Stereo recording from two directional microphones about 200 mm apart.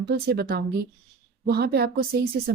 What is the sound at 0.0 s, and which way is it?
Speech, 50° right (ahead or behind).